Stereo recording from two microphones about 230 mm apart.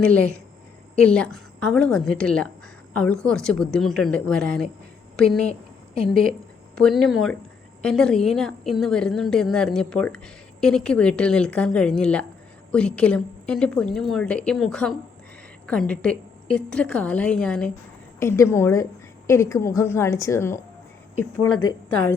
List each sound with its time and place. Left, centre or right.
0.0 s a woman's voice: centre
6.7 s a woman's voice: centre